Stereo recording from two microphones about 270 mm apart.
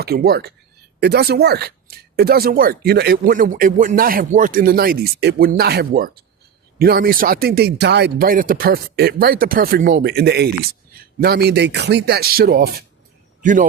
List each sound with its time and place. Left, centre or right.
0.0 s a man's voice: right